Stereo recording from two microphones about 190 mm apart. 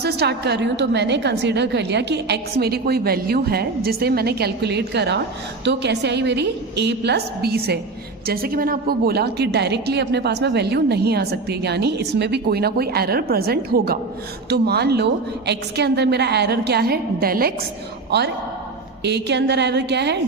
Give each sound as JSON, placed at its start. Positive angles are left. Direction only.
{"t": 0.0, "sound": "a woman's voice", "side_deg": -60}
{"t": 18.1, "sound": "a woman's voice", "side_deg": -60}